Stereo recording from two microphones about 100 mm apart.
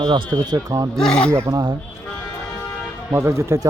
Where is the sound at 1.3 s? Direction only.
35° right (ahead or behind).